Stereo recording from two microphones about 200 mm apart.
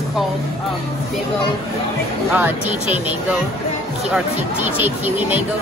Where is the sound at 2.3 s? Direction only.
10° right (ahead or behind).